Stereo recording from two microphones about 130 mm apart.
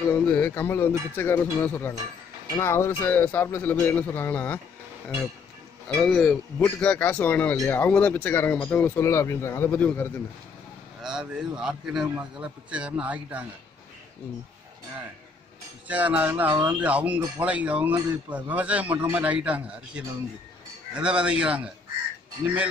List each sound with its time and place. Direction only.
0.1 s speech: 10° left (ahead or behind)
6.1 s speech: 5° left (ahead or behind)
11.0 s a man's voice: 5° right (ahead or behind)
15.9 s a man's voice: 10° right (ahead or behind)